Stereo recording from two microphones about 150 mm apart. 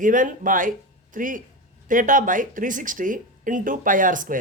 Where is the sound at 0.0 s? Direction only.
60° right (ahead or behind).